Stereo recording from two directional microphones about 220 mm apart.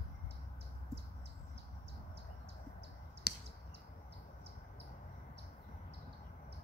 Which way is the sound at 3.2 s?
45° left (ahead or behind).